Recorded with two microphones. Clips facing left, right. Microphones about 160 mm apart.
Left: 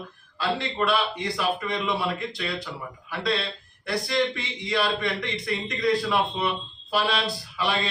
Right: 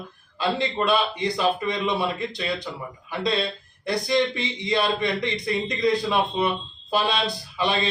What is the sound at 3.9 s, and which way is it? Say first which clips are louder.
Speech: right 3 dB; 20° right (ahead or behind).